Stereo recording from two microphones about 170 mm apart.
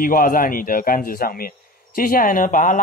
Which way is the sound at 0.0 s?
55° left (ahead or behind).